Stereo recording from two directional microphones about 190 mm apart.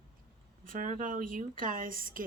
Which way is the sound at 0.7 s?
45° right (ahead or behind).